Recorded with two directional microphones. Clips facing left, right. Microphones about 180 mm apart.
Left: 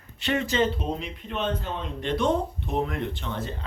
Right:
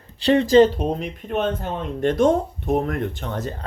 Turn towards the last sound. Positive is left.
turn(degrees=-45)  # may be behind; listen again after turning